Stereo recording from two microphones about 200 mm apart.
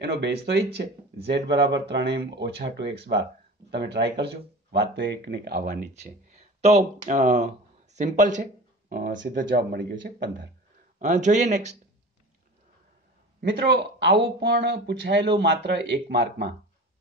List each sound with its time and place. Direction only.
0.0 s speech: 55° right (ahead or behind)
11.0 s speech: 35° right (ahead or behind)
13.4 s speech: 55° right (ahead or behind)